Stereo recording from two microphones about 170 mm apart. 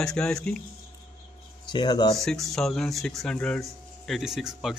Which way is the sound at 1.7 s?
25° left (ahead or behind).